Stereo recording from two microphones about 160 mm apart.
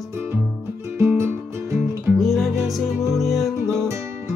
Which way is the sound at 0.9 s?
15° right (ahead or behind).